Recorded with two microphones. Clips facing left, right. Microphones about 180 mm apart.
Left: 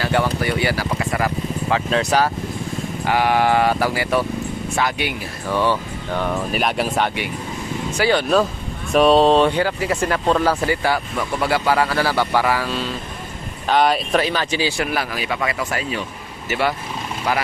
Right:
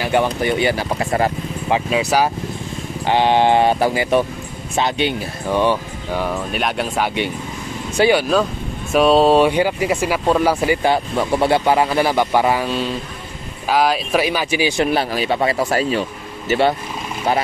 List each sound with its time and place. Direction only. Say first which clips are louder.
0.0 s speech: right 2 dB; 20° right (ahead or behind)
1.7 s speech: right 2 dB; 10° right (ahead or behind)
3.1 s speech: right 3 dB; 25° right (ahead or behind)
6.1 s speech: even; 5° right (ahead or behind)
8.1 s speech: left 3 dB; 5° right (ahead or behind); by 12.8 s 20° right (ahead or behind)
13.7 s speech: even; centre (ahead or behind)
14.8 s speech: right 5 dB; 30° right (ahead or behind)